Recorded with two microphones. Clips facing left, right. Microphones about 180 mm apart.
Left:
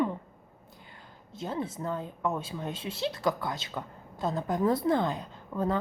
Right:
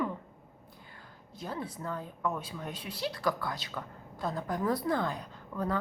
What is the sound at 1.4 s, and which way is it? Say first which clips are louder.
A woman's voice: left 5 dB; 25° left (ahead or behind).